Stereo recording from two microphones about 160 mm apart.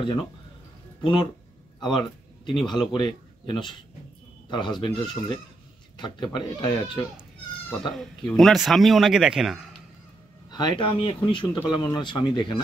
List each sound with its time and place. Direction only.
1.0 s a man's voice: 30° left (ahead or behind)
7.9 s a man's voice: centre (ahead or behind)
10.5 s speech: 30° left (ahead or behind)